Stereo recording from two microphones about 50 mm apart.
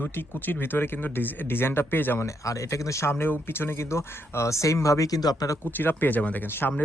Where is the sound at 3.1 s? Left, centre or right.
Left.